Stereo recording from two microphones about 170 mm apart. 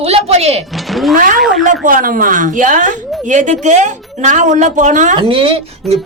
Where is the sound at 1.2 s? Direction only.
50° right (ahead or behind).